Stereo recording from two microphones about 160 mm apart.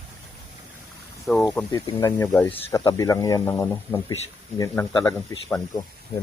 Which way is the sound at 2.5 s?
35° left (ahead or behind).